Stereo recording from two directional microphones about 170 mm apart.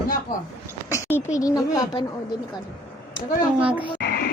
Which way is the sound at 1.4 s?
20° left (ahead or behind).